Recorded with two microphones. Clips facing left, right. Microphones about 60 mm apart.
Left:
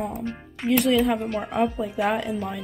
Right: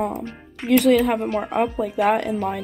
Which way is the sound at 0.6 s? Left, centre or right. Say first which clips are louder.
Right 4 dB; right.